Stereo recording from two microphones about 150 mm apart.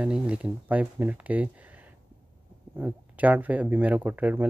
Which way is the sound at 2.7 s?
10° right (ahead or behind).